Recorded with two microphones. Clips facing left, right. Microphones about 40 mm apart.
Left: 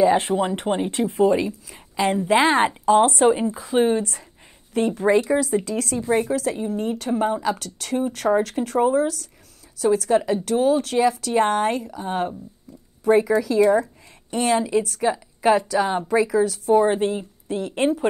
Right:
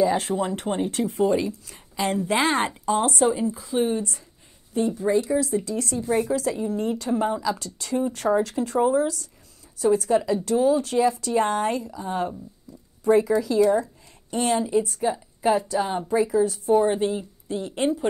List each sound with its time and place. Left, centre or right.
0.0 s speech: left
1.0 s a woman's voice: left
2.8 s a woman's voice: left
4.7 s a woman's voice: left
5.3 s speech: left
6.3 s a woman's voice: left
10.8 s a woman's voice: left
16.8 s a woman's voice: left